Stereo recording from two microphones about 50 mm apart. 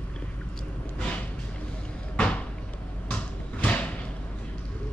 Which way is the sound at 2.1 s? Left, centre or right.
Left.